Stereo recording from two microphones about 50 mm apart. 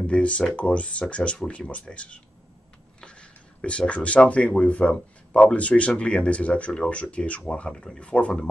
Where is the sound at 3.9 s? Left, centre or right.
Left.